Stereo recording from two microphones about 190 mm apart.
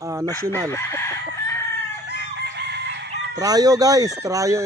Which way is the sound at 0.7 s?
15° left (ahead or behind).